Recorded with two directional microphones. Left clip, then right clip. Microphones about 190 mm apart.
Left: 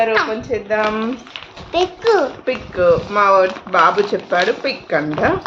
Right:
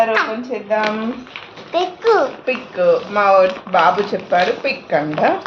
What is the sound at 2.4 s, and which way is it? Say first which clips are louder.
Speech: left 3 dB; 30° left (ahead or behind).